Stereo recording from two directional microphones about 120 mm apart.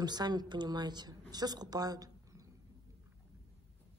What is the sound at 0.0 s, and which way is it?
A woman's voice, 35° right (ahead or behind).